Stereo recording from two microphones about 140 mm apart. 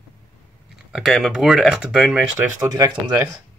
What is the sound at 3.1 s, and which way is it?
Speech, 15° right (ahead or behind).